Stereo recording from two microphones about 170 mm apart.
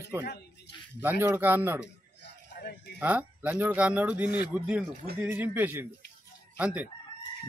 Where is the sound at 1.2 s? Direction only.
10° right (ahead or behind).